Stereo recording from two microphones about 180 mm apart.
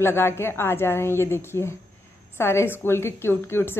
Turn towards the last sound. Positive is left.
turn(degrees=15)  # may be behind; listen again after turning